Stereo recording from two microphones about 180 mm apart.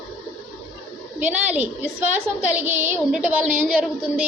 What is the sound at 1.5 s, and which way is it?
A woman's voice, 10° right (ahead or behind).